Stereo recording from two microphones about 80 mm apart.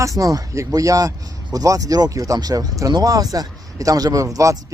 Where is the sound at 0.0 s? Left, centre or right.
Right.